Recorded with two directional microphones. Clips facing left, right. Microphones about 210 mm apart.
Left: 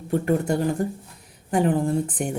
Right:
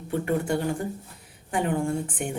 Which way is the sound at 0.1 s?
40° left (ahead or behind).